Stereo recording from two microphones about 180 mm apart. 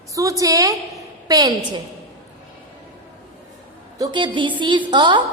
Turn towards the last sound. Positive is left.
turn(degrees=-25)  # may be behind; listen again after turning